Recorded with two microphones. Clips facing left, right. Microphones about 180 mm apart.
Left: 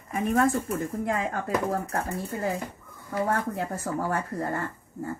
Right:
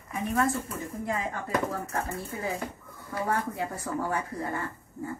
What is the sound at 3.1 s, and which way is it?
A woman's voice, 45° left (ahead or behind).